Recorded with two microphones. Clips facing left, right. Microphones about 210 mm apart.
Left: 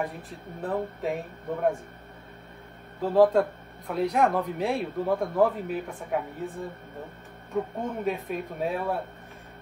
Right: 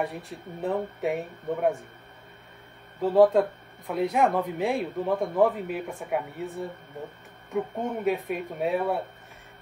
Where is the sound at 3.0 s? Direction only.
Centre (ahead or behind).